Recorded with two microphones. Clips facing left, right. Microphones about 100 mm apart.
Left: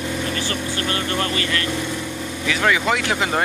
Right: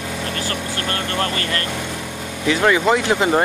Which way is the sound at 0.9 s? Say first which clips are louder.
Right 2 dB; 45° right (ahead or behind).